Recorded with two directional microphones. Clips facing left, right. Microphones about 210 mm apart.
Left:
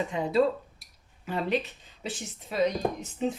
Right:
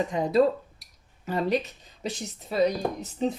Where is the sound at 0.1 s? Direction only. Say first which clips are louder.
Right 2 dB; 40° right (ahead or behind).